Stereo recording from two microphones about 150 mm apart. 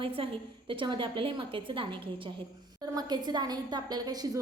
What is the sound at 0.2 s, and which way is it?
A woman's voice, 35° right (ahead or behind).